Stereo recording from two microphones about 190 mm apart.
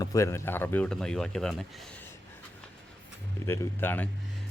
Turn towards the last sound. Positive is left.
turn(degrees=10)  # may be behind; listen again after turning